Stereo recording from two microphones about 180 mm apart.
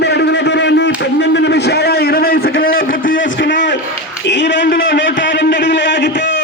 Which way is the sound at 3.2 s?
90° left.